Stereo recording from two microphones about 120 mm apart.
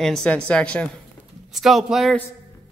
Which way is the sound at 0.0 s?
5° left (ahead or behind).